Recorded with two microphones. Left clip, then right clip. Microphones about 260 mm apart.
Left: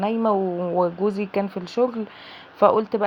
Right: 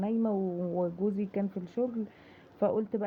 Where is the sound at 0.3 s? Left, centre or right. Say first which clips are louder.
Left 10 dB; left.